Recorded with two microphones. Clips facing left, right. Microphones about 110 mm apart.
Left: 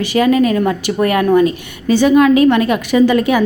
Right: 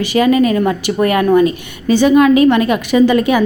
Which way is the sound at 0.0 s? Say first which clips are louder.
Right 1 dB; 15° right (ahead or behind).